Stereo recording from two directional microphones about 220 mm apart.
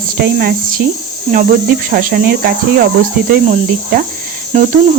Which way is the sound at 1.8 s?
45° right (ahead or behind).